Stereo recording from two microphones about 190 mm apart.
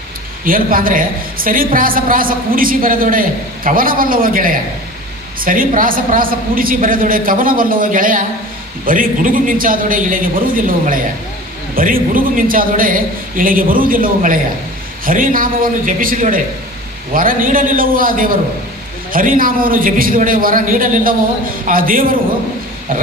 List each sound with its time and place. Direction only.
0.4 s a woman's voice: 45° right (ahead or behind)